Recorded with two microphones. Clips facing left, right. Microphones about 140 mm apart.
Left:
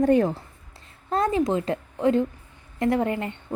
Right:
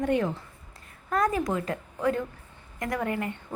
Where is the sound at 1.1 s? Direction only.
25° left (ahead or behind).